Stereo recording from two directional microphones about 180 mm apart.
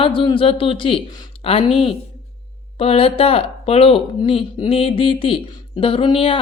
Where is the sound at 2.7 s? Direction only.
30° left (ahead or behind).